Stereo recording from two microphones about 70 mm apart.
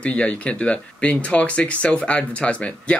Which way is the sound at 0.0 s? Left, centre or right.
Centre.